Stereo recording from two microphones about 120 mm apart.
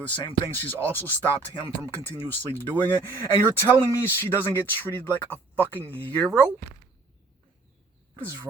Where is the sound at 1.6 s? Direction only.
50° left (ahead or behind).